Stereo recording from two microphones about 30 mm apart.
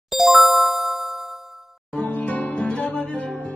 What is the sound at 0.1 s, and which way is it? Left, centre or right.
Music, centre.